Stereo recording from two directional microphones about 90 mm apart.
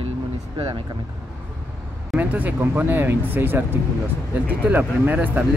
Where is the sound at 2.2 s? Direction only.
20° right (ahead or behind).